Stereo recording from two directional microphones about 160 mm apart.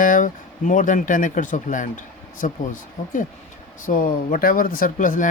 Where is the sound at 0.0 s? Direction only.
55° left (ahead or behind).